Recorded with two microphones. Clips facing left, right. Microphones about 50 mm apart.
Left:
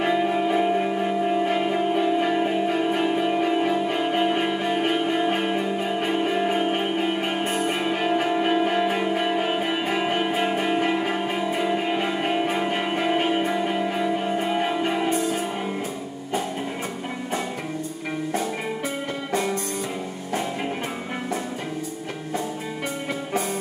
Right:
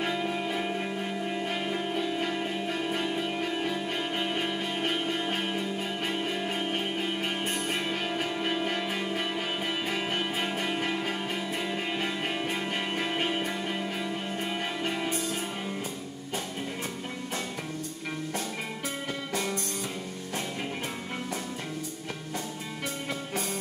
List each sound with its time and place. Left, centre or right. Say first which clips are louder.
0.0 s music: left 8 dB; centre
19.3 s music: left 8 dB; centre